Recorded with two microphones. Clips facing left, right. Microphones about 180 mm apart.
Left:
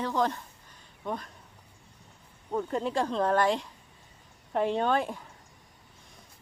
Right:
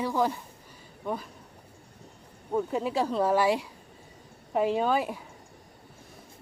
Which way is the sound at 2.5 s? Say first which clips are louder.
Right 2 dB; 5° right (ahead or behind).